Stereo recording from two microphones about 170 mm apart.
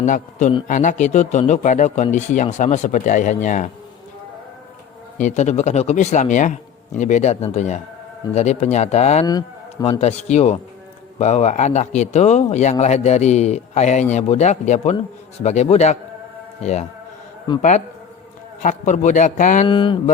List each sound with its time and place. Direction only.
0.0 s a man's voice: 45° left (ahead or behind)
5.1 s a man's voice: 45° left (ahead or behind)
17.6 s a man's voice: 45° left (ahead or behind)
19.6 s speech: 30° left (ahead or behind)